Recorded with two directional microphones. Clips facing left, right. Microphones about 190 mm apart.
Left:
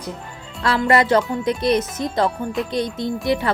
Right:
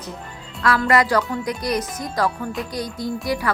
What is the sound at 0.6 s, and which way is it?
Speech, 25° left (ahead or behind).